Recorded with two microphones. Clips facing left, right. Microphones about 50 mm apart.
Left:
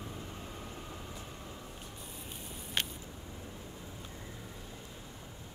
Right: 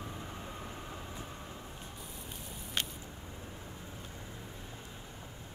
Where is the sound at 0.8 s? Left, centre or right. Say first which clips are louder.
Right 1 dB; centre.